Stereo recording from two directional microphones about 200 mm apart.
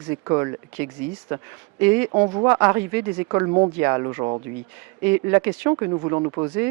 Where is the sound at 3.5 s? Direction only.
30° right (ahead or behind).